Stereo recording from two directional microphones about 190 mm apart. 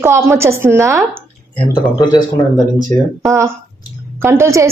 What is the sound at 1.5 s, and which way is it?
Speech, 25° left (ahead or behind).